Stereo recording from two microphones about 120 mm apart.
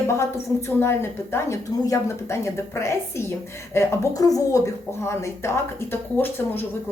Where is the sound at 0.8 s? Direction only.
20° left (ahead or behind).